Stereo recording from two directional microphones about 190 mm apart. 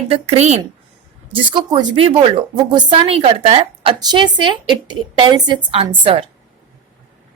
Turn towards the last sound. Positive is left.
turn(degrees=-30)  # may be behind; listen again after turning